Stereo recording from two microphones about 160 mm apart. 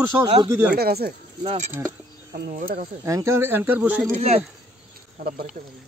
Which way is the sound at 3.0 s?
20° right (ahead or behind).